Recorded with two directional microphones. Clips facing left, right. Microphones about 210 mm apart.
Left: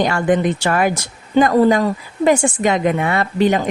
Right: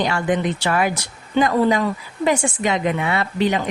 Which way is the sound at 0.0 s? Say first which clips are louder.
Left 4 dB; 50° left (ahead or behind).